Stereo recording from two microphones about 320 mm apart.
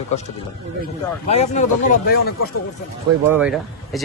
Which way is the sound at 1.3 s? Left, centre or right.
Left.